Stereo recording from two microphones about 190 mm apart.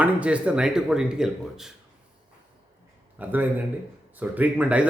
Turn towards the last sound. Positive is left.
turn(degrees=-5)  # may be behind; listen again after turning